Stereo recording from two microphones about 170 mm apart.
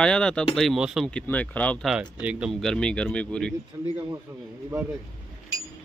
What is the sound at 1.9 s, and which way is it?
Speech, 5° right (ahead or behind).